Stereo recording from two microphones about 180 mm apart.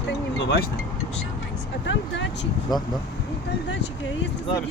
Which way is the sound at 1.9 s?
80° left.